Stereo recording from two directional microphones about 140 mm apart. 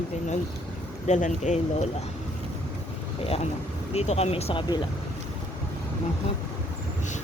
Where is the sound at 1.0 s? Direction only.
60° left (ahead or behind).